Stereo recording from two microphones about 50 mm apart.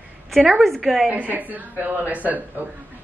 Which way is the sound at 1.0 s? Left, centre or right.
Right.